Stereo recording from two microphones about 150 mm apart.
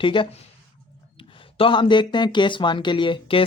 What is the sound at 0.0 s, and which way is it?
Speech, 35° left (ahead or behind).